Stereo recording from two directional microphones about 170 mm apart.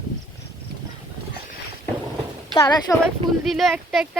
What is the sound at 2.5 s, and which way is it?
Speech, 20° left (ahead or behind).